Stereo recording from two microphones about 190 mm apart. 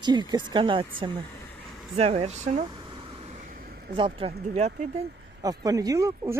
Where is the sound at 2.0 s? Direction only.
35° right (ahead or behind).